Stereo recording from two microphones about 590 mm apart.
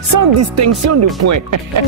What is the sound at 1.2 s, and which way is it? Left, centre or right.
Speech, right.